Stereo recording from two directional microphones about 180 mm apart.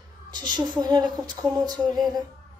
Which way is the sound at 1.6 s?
20° right (ahead or behind).